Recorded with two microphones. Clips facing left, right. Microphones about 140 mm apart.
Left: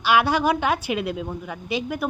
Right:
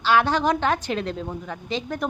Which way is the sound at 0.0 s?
10° left (ahead or behind).